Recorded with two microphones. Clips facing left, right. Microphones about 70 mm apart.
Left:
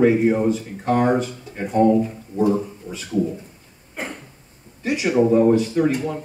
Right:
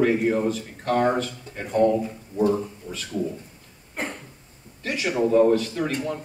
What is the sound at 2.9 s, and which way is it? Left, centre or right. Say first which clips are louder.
Speech: left 2 dB; left.